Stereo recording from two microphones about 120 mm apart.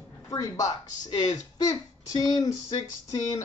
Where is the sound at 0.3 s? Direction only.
30° left (ahead or behind).